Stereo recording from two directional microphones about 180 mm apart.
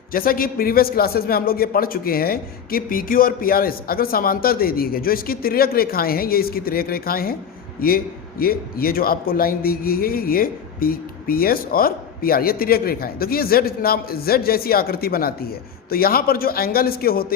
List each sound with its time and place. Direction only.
0.1 s a man's voice: 55° left (ahead or behind)